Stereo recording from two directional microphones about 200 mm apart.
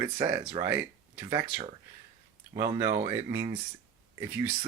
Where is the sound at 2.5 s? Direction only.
20° right (ahead or behind).